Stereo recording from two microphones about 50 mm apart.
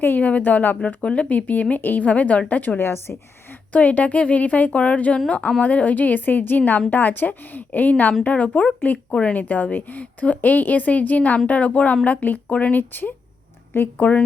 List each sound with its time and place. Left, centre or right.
0.0 s a woman's voice: left
0.8 s a woman's voice: left
2.7 s a woman's voice: left
3.7 s a woman's voice: left
12.9 s a woman's voice: left
13.8 s a woman's voice: left